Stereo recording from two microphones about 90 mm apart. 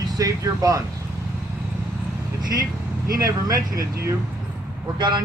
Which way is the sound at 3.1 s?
40° right (ahead or behind).